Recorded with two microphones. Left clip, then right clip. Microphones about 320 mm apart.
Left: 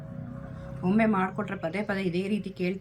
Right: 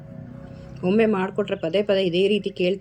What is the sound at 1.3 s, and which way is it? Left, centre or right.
Speech, centre.